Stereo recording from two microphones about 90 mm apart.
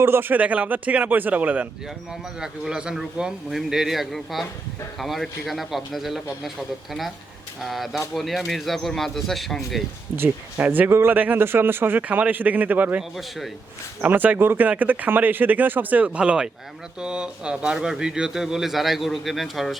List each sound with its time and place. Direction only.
0.0 s a man's voice: 25° right (ahead or behind); by 9.6 s centre (ahead or behind)
10.2 s speech: 20° right (ahead or behind)
13.0 s speech: centre (ahead or behind)
14.0 s speech: 20° right (ahead or behind); by 19.8 s centre (ahead or behind)